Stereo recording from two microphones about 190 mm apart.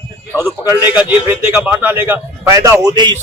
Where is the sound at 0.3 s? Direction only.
15° right (ahead or behind).